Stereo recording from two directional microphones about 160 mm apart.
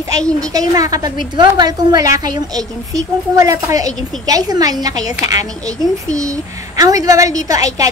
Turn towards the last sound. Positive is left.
turn(degrees=-20)  # may be behind; listen again after turning